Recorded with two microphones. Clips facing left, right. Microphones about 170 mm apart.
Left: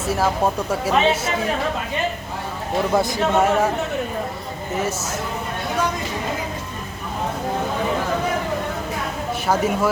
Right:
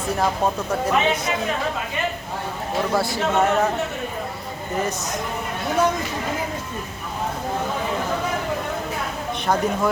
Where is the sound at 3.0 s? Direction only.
15° left (ahead or behind).